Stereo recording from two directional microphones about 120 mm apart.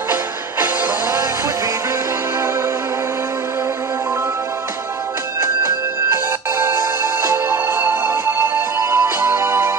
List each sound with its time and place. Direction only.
5.4 s music: 25° right (ahead or behind)